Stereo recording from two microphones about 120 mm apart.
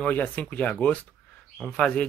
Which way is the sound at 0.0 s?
15° left (ahead or behind).